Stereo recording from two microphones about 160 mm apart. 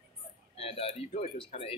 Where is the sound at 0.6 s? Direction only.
35° left (ahead or behind).